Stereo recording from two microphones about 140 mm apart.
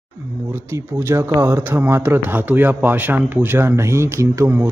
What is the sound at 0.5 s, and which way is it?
Speech, 20° right (ahead or behind).